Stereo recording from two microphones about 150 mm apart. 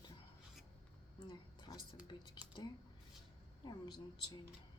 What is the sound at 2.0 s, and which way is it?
Speech, 30° left (ahead or behind).